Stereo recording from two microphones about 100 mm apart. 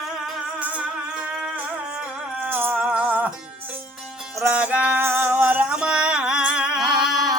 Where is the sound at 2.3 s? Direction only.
20° right (ahead or behind).